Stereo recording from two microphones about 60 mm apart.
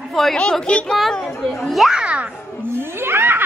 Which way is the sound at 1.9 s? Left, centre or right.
Centre.